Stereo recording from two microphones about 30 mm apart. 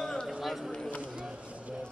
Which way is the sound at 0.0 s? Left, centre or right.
Centre.